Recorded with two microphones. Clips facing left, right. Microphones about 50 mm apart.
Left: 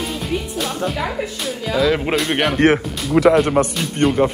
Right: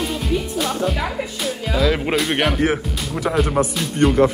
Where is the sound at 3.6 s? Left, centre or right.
Left.